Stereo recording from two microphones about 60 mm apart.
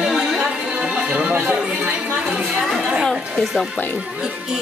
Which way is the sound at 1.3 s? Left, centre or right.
Right.